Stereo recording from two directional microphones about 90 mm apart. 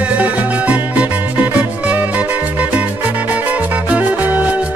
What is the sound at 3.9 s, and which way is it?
Music, 15° right (ahead or behind).